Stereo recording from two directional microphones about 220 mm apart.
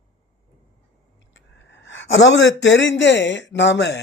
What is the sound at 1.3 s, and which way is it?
Speech, 55° left (ahead or behind).